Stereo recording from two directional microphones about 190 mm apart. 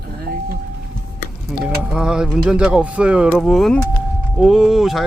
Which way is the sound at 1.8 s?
5° right (ahead or behind).